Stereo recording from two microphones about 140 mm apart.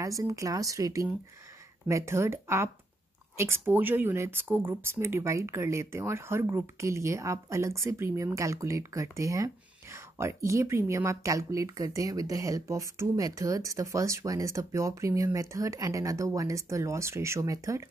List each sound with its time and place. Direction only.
0.0 s speech: 25° right (ahead or behind)